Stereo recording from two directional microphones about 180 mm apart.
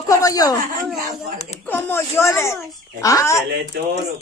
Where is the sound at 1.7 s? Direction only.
10° left (ahead or behind).